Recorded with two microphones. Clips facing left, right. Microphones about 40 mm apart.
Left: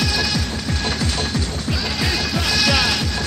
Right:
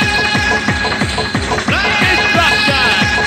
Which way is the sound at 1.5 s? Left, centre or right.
Right.